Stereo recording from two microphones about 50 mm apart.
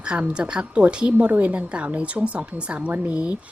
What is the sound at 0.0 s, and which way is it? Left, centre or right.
Speech, centre.